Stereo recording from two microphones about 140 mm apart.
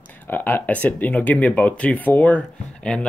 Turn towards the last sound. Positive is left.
turn(degrees=10)  # may be behind; listen again after turning